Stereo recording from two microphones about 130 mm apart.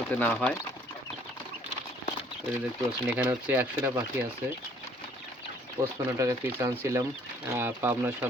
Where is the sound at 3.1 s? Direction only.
15° right (ahead or behind).